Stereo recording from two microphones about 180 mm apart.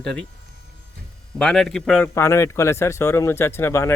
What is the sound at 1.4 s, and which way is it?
Speech, centre (ahead or behind).